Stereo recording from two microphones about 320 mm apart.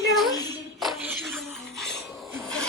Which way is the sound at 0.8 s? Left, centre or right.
Centre.